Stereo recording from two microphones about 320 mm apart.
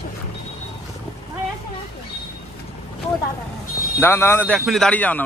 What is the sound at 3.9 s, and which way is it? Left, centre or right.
A man's voice, centre.